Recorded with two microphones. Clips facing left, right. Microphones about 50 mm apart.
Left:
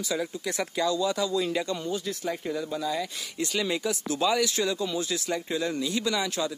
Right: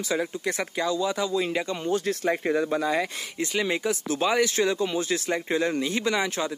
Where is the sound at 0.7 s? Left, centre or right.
Right.